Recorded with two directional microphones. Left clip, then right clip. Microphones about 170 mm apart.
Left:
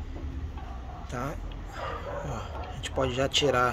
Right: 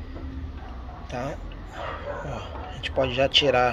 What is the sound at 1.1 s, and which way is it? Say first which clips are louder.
Speech: right 4 dB; 20° left (ahead or behind).